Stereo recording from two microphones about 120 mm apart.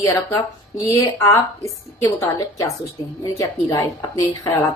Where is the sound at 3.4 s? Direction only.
30° left (ahead or behind).